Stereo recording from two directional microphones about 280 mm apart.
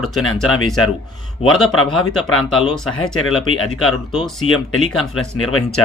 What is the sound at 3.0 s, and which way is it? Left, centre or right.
Speech, left.